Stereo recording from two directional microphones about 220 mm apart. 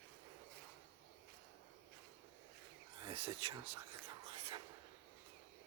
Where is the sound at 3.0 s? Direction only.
25° right (ahead or behind).